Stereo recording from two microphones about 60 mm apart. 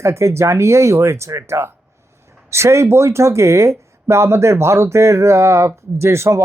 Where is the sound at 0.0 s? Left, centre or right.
Right.